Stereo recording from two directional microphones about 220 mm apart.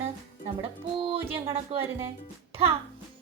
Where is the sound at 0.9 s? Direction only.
25° right (ahead or behind).